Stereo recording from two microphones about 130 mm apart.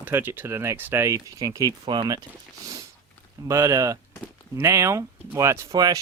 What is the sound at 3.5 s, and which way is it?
Speech, 25° right (ahead or behind).